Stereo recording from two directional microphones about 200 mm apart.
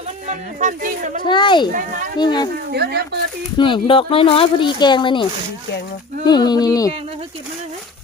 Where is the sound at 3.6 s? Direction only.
25° left (ahead or behind).